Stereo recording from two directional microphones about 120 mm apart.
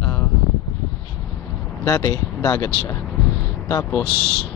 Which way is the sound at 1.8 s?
25° left (ahead or behind).